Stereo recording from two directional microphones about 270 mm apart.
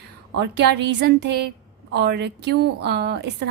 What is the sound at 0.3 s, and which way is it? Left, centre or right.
A woman's voice, right.